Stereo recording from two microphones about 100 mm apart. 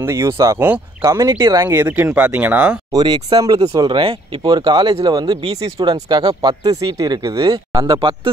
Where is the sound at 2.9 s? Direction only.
45° right (ahead or behind).